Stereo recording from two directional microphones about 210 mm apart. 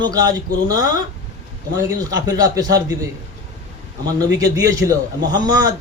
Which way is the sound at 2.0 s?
15° right (ahead or behind).